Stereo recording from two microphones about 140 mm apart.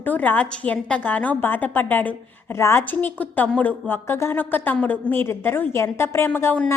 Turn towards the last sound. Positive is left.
turn(degrees=10)  # may be behind; listen again after turning